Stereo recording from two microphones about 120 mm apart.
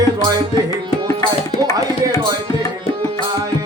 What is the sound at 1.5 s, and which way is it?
Music, 55° left (ahead or behind).